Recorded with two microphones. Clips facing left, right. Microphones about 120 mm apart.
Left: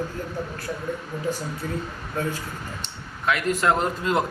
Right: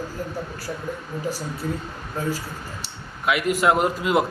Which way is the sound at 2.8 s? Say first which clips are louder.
Right 3 dB; 10° right (ahead or behind).